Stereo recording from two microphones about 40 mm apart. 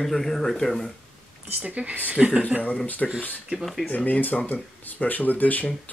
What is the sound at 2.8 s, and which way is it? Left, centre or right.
Speech, left.